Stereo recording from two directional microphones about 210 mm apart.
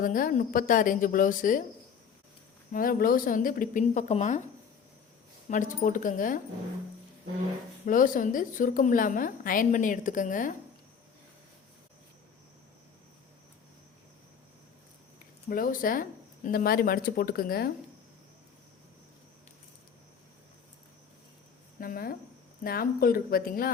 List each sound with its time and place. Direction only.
0.0 s a woman's voice: 40° left (ahead or behind)
2.7 s a woman's voice: 40° left (ahead or behind)
5.5 s a woman's voice: 40° left (ahead or behind)
7.9 s a woman's voice: 40° left (ahead or behind)
15.4 s speech: 40° left (ahead or behind)
21.8 s speech: 45° left (ahead or behind)